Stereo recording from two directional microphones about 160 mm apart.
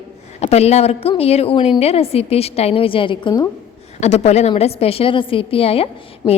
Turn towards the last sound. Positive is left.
turn(degrees=35)  # may be behind; listen again after turning